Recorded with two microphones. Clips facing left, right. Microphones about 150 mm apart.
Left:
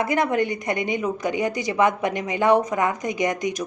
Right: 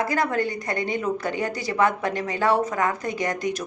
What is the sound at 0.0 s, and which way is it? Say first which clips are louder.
A woman's voice: left 2 dB; 20° left (ahead or behind).